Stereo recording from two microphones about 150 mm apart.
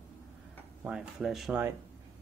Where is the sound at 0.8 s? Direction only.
5° right (ahead or behind).